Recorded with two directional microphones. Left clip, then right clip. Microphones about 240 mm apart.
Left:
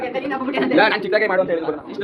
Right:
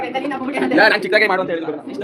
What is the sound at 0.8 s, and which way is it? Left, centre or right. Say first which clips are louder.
A child's voice: right 4 dB; centre.